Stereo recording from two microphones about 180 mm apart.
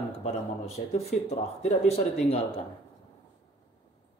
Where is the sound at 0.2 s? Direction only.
35° left (ahead or behind).